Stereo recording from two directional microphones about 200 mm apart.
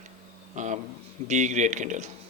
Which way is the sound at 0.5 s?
40° right (ahead or behind).